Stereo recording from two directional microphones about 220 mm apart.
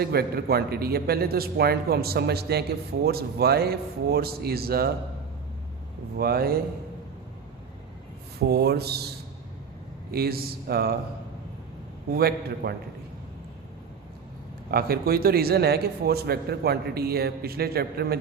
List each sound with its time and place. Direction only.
0.0 s a man's voice: 45° right (ahead or behind)
6.1 s a man's voice: 45° right (ahead or behind)
8.4 s a man's voice: 45° right (ahead or behind)
12.1 s a man's voice: 45° right (ahead or behind)
14.7 s a man's voice: 45° right (ahead or behind)